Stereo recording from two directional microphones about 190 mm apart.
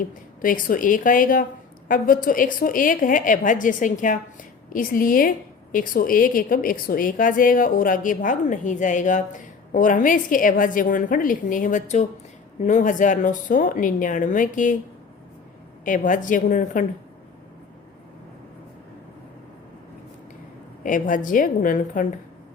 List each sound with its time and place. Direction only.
0.0 s a woman's voice: 45° left (ahead or behind)
15.8 s a woman's voice: 45° left (ahead or behind)
20.8 s a woman's voice: 45° left (ahead or behind)